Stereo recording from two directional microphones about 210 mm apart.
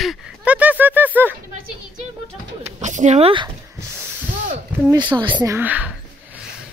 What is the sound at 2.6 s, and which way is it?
Speech, 35° right (ahead or behind).